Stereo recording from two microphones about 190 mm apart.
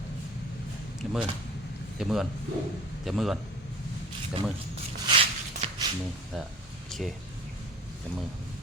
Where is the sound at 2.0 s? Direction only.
Centre (ahead or behind).